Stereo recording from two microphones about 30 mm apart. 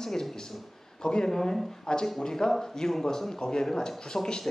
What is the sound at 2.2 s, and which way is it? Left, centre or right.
Speech, centre.